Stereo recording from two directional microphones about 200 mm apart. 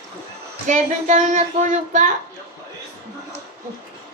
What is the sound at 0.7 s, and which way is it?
Speech, 40° right (ahead or behind).